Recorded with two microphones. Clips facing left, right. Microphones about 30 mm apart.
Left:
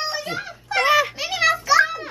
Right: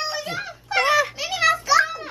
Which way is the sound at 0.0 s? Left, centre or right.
Centre.